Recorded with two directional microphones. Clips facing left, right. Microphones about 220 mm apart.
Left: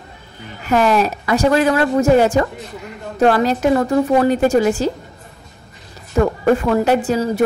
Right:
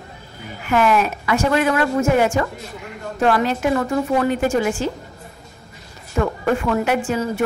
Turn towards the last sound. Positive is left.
turn(degrees=35)  # may be behind; listen again after turning